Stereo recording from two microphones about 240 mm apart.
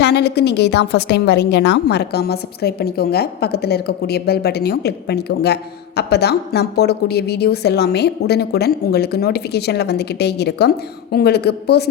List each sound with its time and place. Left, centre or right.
0.0 s a woman's voice: left